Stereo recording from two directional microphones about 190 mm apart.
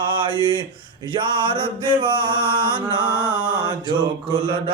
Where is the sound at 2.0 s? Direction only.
25° right (ahead or behind).